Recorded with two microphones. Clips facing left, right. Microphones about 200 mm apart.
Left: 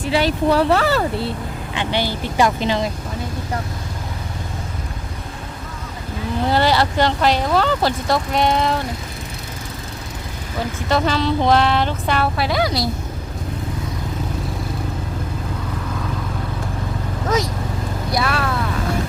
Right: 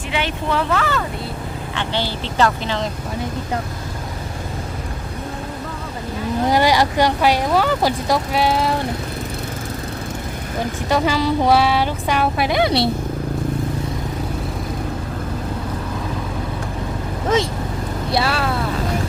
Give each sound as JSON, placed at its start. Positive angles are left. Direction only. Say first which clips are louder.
{"t": 0.1, "sound": "speech", "louder": "left 5 dB", "side_deg": 35}
{"t": 1.7, "sound": "speech", "louder": "left 2 dB", "side_deg": 15}
{"t": 6.5, "sound": "speech", "louder": "right 1 dB", "side_deg": -15}
{"t": 10.8, "sound": "speech", "louder": "even", "side_deg": -10}
{"t": 17.2, "sound": "speech", "louder": "right 2 dB", "side_deg": -25}